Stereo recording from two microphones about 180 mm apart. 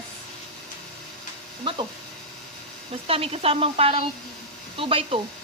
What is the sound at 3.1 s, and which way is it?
A woman's voice, 30° right (ahead or behind).